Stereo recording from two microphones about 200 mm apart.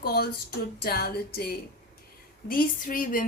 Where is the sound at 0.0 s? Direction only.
50° left (ahead or behind).